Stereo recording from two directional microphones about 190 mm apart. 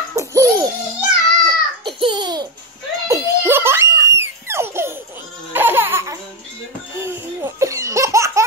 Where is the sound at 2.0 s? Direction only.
25° right (ahead or behind).